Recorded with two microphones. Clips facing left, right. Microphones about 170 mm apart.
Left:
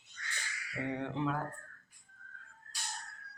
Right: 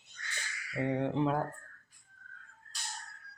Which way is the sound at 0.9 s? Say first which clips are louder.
Right 5 dB; 30° right (ahead or behind).